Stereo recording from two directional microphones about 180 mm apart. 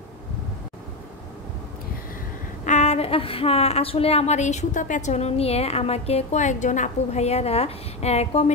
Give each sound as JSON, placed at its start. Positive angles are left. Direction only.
{"t": 2.6, "sound": "a woman's voice", "side_deg": 40}